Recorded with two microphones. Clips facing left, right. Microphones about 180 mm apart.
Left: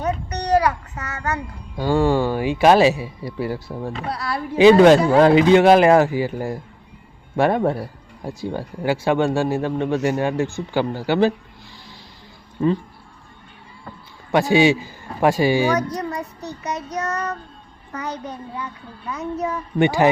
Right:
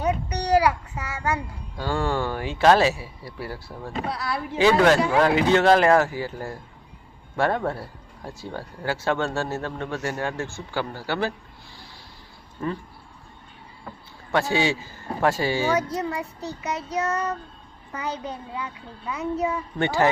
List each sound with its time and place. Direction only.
0.0 s child singing: 10° right (ahead or behind)
1.7 s speech: 15° left (ahead or behind)
4.1 s speech: centre (ahead or behind)
4.5 s speech: 20° left (ahead or behind)
12.6 s speech: 20° left (ahead or behind)
14.3 s speech: 15° left (ahead or behind)
16.0 s a child's voice: 5° right (ahead or behind)
19.8 s speech: 15° left (ahead or behind)